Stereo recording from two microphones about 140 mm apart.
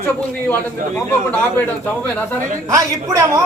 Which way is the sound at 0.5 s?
10° left (ahead or behind).